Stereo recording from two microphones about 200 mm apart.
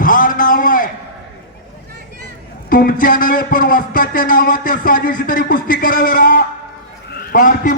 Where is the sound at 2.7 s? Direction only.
45° left (ahead or behind).